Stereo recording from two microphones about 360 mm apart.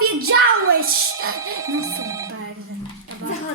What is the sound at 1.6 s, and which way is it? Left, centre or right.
Speech, centre.